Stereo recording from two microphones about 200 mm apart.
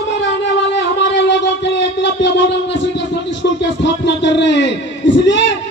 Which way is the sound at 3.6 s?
60° left (ahead or behind).